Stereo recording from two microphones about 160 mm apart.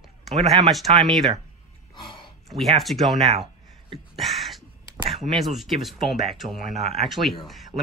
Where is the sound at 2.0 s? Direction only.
30° left (ahead or behind).